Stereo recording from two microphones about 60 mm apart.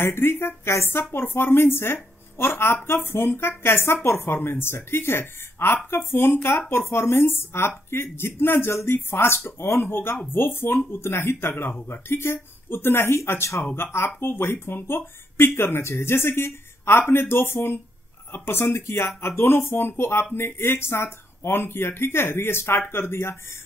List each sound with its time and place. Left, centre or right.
0.0 s speech: left